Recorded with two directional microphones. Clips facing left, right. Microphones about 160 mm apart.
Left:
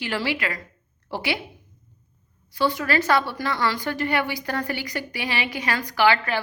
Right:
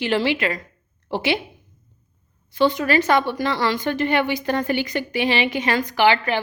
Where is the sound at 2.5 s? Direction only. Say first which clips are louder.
Right 5 dB; 20° right (ahead or behind).